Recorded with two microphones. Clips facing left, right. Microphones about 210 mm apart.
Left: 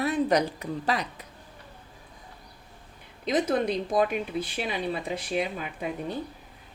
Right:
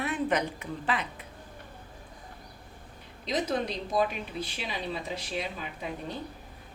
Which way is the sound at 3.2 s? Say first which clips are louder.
Left 5 dB; 55° left (ahead or behind).